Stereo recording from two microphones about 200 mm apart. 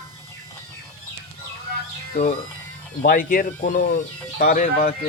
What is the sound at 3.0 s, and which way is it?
Speech, 45° left (ahead or behind).